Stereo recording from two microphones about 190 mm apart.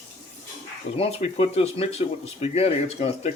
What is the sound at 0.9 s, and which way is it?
Speech, 30° left (ahead or behind).